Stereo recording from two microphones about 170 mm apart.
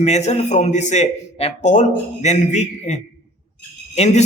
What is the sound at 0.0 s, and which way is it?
Speech, 40° left (ahead or behind).